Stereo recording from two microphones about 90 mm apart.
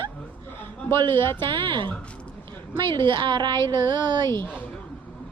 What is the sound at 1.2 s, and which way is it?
Speech, 25° left (ahead or behind).